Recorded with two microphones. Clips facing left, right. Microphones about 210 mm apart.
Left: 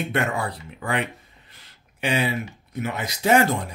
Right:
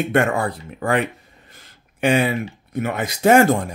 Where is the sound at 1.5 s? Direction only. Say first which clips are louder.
Right 5 dB; 50° right (ahead or behind).